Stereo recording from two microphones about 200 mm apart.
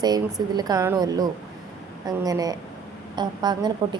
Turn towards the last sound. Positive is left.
turn(degrees=-20)  # may be behind; listen again after turning